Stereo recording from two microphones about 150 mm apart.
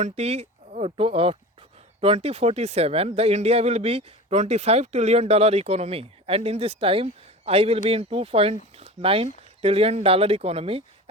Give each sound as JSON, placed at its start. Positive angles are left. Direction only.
{"t": 0.0, "sound": "speech", "side_deg": -45}